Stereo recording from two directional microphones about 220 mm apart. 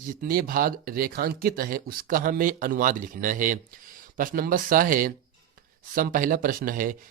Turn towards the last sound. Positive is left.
turn(degrees=-40)  # may be behind; listen again after turning